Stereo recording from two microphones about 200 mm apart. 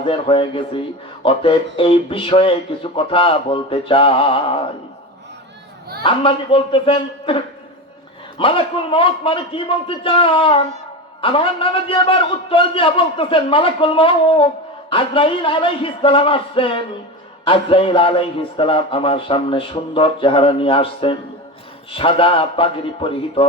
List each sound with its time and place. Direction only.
0.0 s a man's voice: 25° left (ahead or behind)
6.0 s a man's voice: 25° left (ahead or behind)